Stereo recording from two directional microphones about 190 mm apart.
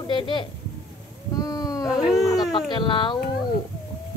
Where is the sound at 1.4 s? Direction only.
20° left (ahead or behind).